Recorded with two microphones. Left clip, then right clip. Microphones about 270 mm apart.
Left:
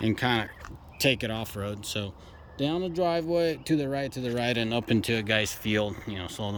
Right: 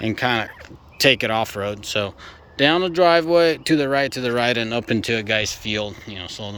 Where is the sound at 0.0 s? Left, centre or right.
Centre.